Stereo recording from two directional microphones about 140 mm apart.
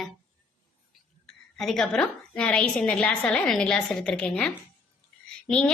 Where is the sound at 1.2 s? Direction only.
Centre (ahead or behind).